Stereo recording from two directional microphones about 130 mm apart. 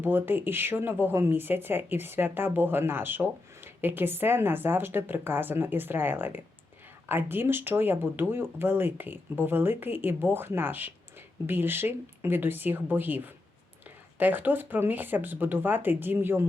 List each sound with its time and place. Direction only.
0.0 s speech: 15° right (ahead or behind)